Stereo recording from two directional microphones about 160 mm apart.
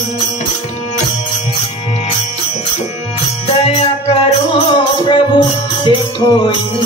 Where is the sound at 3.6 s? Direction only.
40° left (ahead or behind).